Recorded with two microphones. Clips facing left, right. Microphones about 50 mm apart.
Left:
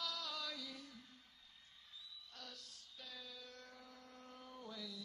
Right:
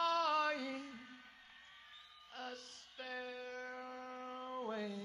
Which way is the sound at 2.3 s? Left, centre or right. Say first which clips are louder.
Right 11 dB; right.